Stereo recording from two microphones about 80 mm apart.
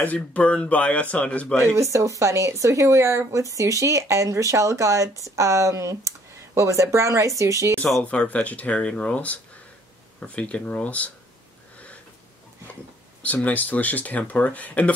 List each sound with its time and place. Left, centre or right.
0.0 s speech: centre
1.8 s speech: right
8.0 s speech: centre
13.2 s speech: centre